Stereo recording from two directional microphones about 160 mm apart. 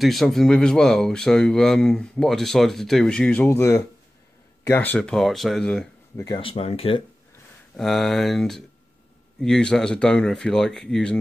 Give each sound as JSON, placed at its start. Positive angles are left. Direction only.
{"t": 0.0, "sound": "speech", "side_deg": 0}
{"t": 6.1, "sound": "speech", "side_deg": 20}
{"t": 6.4, "sound": "speech", "side_deg": 35}
{"t": 7.7, "sound": "speech", "side_deg": 0}